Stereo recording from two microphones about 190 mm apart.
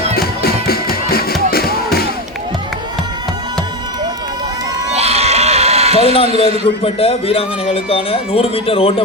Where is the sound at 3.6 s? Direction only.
20° right (ahead or behind).